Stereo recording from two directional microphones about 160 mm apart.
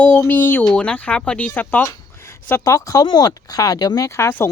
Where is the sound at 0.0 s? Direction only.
10° left (ahead or behind).